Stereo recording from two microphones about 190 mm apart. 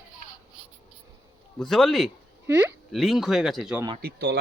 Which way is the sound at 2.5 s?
10° right (ahead or behind).